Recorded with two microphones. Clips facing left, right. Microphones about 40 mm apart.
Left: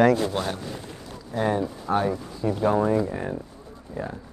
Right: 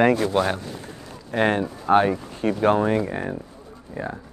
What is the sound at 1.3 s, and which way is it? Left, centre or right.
Speech, right.